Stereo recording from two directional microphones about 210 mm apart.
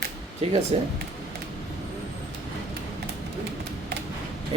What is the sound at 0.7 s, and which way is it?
Speech, 25° right (ahead or behind).